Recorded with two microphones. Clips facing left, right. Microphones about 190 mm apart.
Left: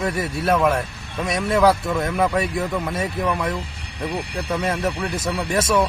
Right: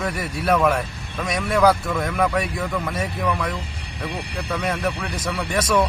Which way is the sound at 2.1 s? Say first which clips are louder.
Left 1 dB; 15° left (ahead or behind).